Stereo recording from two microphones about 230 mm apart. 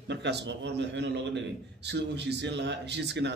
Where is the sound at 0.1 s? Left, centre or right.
Right.